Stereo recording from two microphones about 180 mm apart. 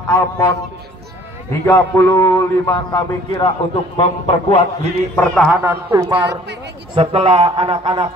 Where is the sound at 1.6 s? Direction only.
15° left (ahead or behind).